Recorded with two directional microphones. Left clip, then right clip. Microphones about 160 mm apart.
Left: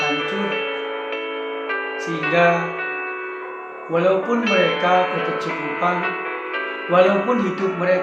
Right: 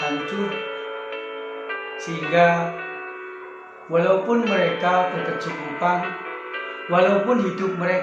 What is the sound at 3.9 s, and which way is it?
Speech, centre (ahead or behind).